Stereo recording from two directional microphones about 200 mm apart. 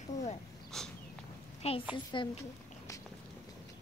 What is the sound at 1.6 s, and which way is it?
Speech, 30° left (ahead or behind).